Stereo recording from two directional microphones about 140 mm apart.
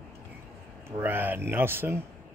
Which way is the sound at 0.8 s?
15° right (ahead or behind).